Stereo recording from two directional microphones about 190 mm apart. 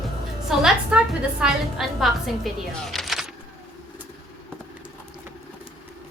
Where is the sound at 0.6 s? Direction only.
5° right (ahead or behind).